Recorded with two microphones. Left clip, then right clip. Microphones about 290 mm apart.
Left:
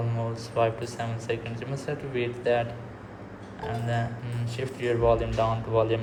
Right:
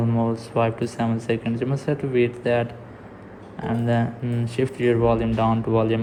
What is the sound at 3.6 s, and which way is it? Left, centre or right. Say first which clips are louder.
Speech: right 7 dB; right.